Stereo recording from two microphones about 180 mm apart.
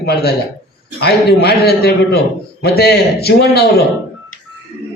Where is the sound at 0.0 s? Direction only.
60° left (ahead or behind).